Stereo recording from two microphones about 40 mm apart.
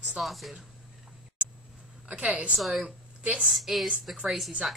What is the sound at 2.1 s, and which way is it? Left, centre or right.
Speech, right.